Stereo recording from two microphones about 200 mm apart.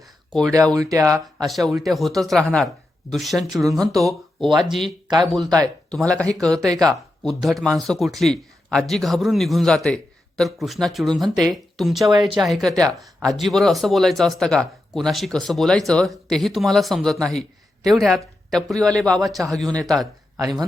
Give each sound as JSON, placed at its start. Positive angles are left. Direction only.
{"t": 0.5, "sound": "speech", "side_deg": -15}
{"t": 1.5, "sound": "speech", "side_deg": 0}
{"t": 5.4, "sound": "speech", "side_deg": -20}
{"t": 5.9, "sound": "speech", "side_deg": 5}
{"t": 20.3, "sound": "speech", "side_deg": -15}